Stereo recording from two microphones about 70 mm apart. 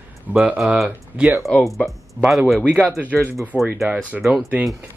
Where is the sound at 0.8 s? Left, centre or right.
Centre.